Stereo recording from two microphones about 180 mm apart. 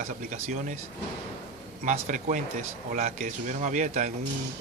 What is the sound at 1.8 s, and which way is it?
Speech, 45° right (ahead or behind).